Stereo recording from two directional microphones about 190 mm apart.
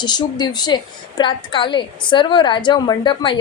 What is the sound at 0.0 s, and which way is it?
Speech, 20° left (ahead or behind).